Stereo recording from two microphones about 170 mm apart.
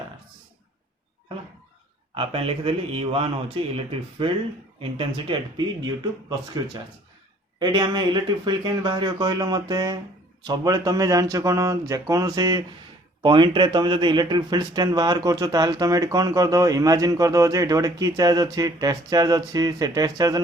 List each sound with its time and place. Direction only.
2.1 s a man's voice: 30° right (ahead or behind)
4.8 s a man's voice: 30° right (ahead or behind)
7.6 s a man's voice: 25° right (ahead or behind)